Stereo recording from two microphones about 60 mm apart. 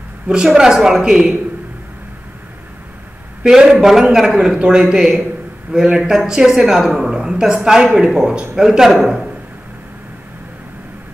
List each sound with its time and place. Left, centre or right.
0.5 s a woman's voice: centre
3.4 s a woman's voice: centre